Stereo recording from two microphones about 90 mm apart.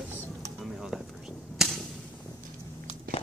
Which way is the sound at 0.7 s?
5° left (ahead or behind).